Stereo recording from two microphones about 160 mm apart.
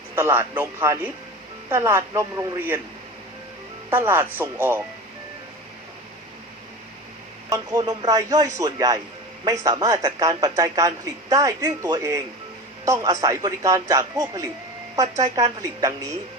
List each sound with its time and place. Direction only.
0.2 s a woman's voice: 15° right (ahead or behind)
3.8 s a woman's voice: 15° right (ahead or behind)
7.5 s speech: 20° right (ahead or behind)